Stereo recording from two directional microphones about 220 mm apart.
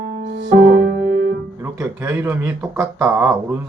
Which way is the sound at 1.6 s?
10° right (ahead or behind).